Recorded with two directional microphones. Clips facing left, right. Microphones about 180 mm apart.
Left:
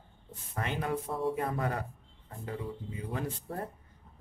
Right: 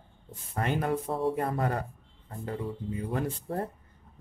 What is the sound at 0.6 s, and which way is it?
Speech, 50° right (ahead or behind).